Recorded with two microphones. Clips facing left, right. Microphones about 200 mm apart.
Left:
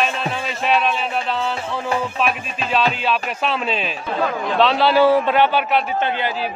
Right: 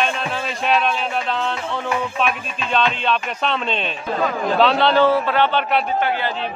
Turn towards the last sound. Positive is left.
turn(degrees=15)  # may be behind; listen again after turning